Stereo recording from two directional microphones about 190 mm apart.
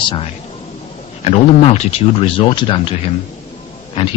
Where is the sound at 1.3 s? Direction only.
30° left (ahead or behind).